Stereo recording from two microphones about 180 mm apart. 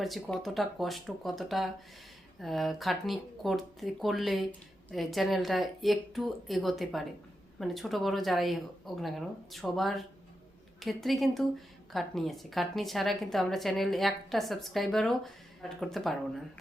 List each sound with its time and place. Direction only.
0.0 s a woman's voice: centre (ahead or behind)